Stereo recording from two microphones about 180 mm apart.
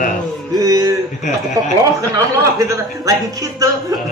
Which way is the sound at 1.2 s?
40° left (ahead or behind).